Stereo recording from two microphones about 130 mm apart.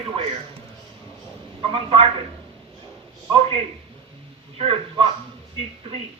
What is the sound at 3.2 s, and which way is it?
Speech, 40° right (ahead or behind).